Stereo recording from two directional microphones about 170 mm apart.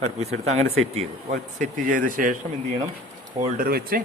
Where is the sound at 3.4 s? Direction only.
60° right (ahead or behind).